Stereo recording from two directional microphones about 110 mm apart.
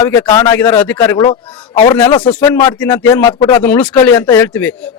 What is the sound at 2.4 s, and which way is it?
Speech, 25° left (ahead or behind).